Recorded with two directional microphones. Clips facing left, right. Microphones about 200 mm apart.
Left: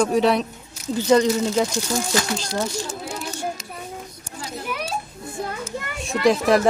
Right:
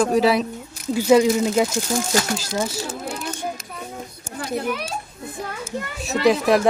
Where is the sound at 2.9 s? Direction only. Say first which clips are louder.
Right 2 dB; 60° right (ahead or behind).